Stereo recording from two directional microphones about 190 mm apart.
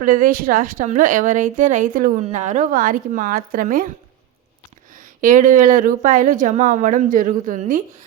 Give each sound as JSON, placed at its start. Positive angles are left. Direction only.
{"t": 0.0, "sound": "a woman's voice", "side_deg": -45}
{"t": 4.9, "sound": "a woman's voice", "side_deg": -45}